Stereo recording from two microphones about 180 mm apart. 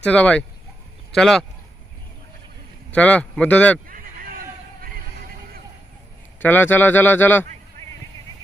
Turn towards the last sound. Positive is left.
turn(degrees=10)  # may be behind; listen again after turning